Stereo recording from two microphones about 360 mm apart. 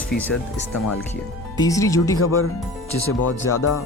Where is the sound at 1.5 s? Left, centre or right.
Centre.